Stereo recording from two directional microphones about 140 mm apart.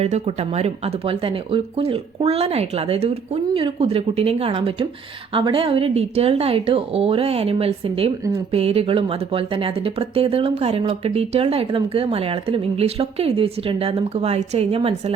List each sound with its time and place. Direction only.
0.0 s speech: 50° right (ahead or behind)